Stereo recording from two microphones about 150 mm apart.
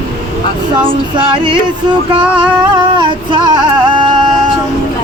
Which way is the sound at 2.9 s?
30° right (ahead or behind).